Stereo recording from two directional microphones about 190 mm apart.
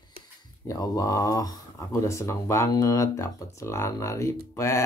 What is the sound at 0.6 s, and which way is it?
Speech, 20° left (ahead or behind).